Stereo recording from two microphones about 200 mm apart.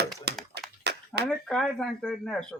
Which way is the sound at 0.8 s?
55° right (ahead or behind).